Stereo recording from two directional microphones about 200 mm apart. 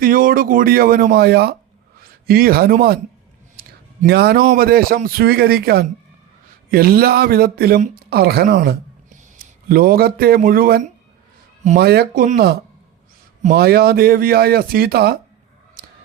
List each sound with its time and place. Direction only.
0.0 s speech: 45° right (ahead or behind)